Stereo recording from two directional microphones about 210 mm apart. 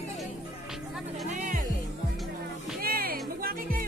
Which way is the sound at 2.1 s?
Centre (ahead or behind).